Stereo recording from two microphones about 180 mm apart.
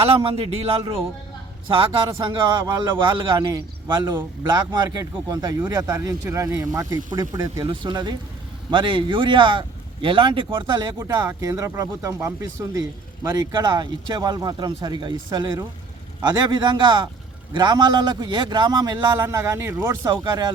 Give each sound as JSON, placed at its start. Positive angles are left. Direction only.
{"t": 0.2, "sound": "speech", "side_deg": -30}
{"t": 2.2, "sound": "speech", "side_deg": -25}